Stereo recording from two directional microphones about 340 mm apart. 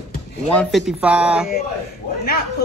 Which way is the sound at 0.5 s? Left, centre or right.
Centre.